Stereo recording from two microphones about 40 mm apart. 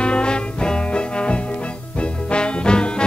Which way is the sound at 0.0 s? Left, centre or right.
Left.